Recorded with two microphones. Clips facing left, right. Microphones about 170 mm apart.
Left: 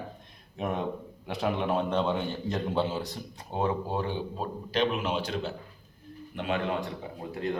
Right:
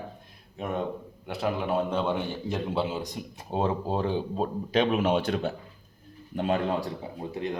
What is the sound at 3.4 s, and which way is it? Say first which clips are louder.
Speech: right 2 dB; 25° right (ahead or behind).